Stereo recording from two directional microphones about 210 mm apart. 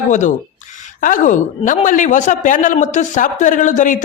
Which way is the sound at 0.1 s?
35° left (ahead or behind).